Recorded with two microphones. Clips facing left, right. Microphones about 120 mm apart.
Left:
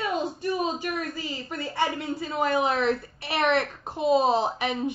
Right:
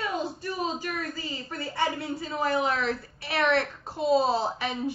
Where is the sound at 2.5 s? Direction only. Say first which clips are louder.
Left 3 dB; 20° left (ahead or behind).